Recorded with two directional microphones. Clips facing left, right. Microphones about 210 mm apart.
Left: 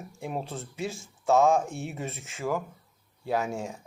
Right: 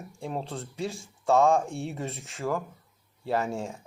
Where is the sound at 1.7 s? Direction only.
30° right (ahead or behind).